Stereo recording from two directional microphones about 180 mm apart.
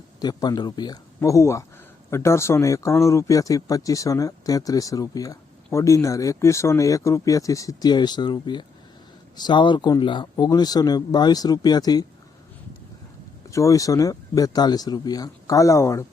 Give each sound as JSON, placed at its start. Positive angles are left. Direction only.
{"t": 0.2, "sound": "speech", "side_deg": 20}
{"t": 13.5, "sound": "speech", "side_deg": 20}